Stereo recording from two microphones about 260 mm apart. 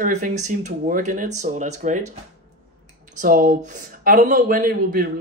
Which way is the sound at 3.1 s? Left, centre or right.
Right.